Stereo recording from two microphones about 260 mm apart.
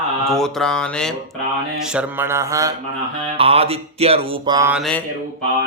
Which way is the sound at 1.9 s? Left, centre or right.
Centre.